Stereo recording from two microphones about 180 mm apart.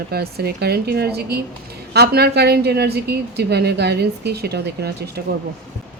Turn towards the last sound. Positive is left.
turn(degrees=-60)  # may be behind; listen again after turning